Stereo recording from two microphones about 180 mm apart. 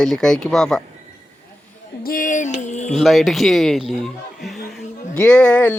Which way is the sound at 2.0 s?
50° left (ahead or behind).